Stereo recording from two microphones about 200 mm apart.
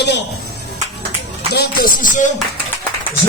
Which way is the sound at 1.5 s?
50° left (ahead or behind).